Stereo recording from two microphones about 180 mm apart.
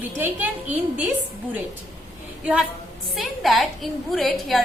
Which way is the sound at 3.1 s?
Centre (ahead or behind).